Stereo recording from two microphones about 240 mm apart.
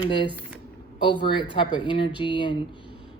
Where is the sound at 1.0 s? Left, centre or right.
Centre.